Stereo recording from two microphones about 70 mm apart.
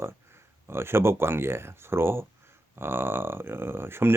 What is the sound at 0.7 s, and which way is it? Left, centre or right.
Speech, right.